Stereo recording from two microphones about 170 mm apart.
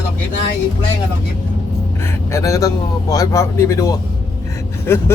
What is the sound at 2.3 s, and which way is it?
Vehicle, 15° left (ahead or behind).